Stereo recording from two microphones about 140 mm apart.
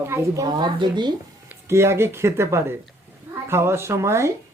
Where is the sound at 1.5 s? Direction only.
20° right (ahead or behind).